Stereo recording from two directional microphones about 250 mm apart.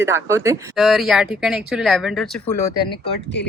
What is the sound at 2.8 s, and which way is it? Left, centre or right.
Speech, left.